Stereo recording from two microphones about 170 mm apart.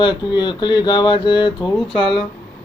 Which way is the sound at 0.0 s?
25° left (ahead or behind).